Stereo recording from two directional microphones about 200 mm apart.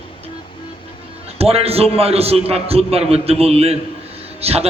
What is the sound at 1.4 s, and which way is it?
A man's voice, 30° right (ahead or behind).